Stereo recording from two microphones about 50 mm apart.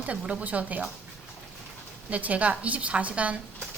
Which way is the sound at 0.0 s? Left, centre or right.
Right.